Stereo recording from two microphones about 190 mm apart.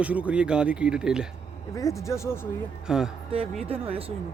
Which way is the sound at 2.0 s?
15° left (ahead or behind).